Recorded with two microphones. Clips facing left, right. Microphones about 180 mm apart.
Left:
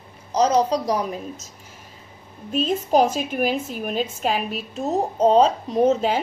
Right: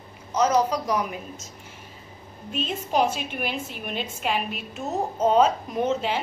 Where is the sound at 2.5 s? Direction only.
40° left (ahead or behind).